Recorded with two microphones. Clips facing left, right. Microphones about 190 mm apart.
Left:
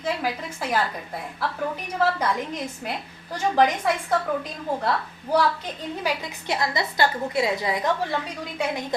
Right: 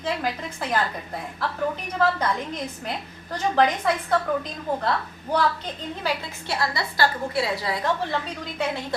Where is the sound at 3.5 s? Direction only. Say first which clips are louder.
Even; 10° left (ahead or behind).